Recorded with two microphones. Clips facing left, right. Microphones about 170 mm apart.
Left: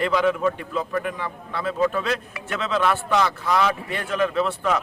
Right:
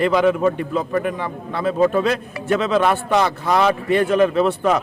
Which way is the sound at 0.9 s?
35° right (ahead or behind).